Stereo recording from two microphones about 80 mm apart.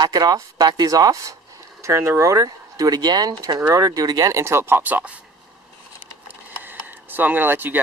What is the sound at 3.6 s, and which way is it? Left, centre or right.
Speech, right.